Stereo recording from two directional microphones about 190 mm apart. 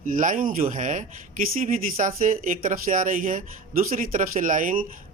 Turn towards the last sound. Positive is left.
turn(degrees=-45)  # may be behind; listen again after turning